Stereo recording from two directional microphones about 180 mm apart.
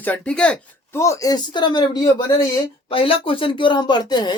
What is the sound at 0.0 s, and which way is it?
Speech, 5° left (ahead or behind).